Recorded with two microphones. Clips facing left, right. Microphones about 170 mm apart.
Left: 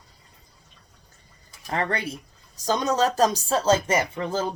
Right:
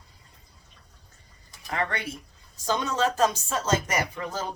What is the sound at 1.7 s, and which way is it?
Speech, 35° left (ahead or behind).